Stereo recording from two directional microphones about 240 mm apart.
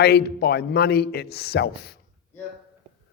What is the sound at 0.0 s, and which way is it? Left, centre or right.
A man's voice, left.